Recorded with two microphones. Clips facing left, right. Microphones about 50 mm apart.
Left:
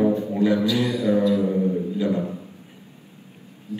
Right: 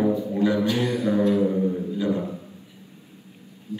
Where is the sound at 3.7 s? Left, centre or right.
Left.